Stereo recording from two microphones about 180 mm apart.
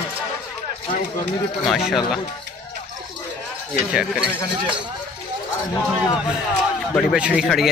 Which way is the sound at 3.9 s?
5° right (ahead or behind).